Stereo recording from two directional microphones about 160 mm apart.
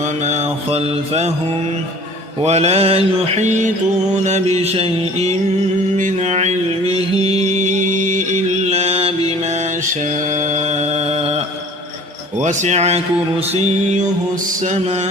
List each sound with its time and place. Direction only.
0.3 s mantra: 40° right (ahead or behind)
2.4 s mantra: 40° right (ahead or behind)
7.6 s mantra: 50° right (ahead or behind)
10.3 s mantra: 50° right (ahead or behind)